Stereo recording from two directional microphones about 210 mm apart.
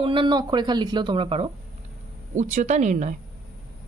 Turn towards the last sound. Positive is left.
turn(degrees=-35)  # may be behind; listen again after turning